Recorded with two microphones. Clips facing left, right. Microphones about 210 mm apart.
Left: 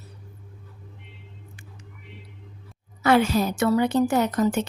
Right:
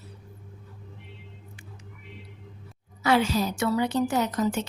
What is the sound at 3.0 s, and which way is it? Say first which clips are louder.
Speech: left 4 dB; 55° left (ahead or behind).